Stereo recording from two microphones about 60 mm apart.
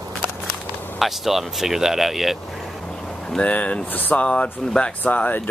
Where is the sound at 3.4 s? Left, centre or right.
Left.